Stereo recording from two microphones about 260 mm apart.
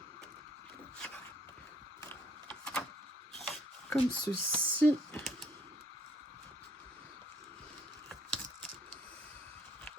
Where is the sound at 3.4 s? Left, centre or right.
Centre.